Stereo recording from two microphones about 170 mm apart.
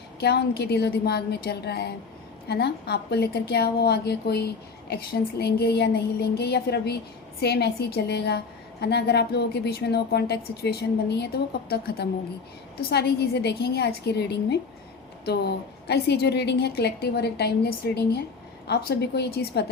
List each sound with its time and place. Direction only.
0.2 s a woman's voice: 75° left (ahead or behind)